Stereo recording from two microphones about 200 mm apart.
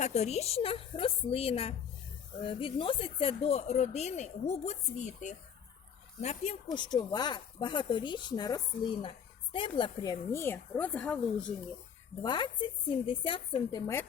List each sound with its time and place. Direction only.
0.0 s speech: 35° left (ahead or behind)
6.7 s speech: 20° left (ahead or behind)
12.2 s speech: 20° left (ahead or behind)